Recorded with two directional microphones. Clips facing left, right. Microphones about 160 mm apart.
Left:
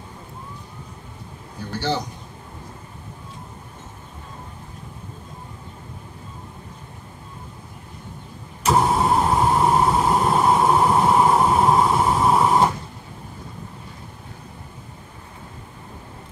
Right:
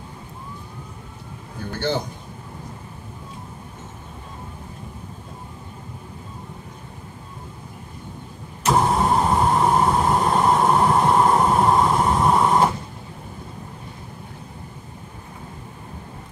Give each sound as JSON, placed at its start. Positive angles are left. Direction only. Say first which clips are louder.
{"t": 1.8, "sound": "a man's voice", "louder": "right 1 dB", "side_deg": -55}
{"t": 8.6, "sound": "vehicle", "louder": "even", "side_deg": 0}